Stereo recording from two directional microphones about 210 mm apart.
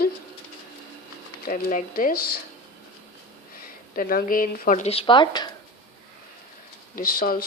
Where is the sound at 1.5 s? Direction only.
40° left (ahead or behind).